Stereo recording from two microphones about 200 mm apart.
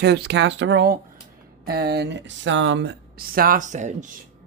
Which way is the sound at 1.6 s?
50° right (ahead or behind).